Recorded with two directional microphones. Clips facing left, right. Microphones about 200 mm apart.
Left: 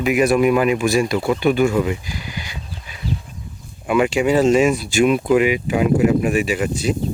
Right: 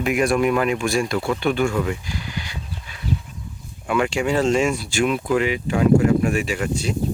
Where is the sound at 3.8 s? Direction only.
15° left (ahead or behind).